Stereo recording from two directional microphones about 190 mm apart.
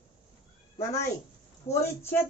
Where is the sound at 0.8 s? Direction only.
15° left (ahead or behind).